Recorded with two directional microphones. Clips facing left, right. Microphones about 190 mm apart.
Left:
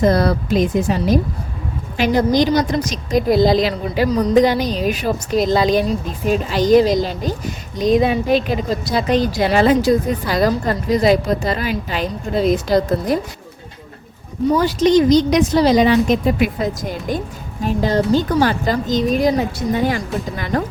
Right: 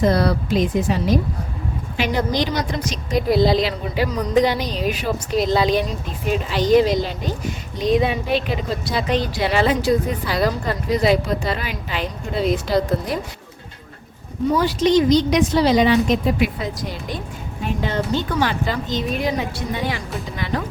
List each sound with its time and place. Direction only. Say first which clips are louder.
0.0 s a woman's voice: left 3 dB; 45° left (ahead or behind)
14.6 s a woman's voice: left 3 dB; 45° left (ahead or behind)